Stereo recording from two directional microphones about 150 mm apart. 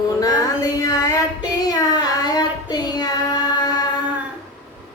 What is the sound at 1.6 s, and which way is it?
Child singing, 25° left (ahead or behind).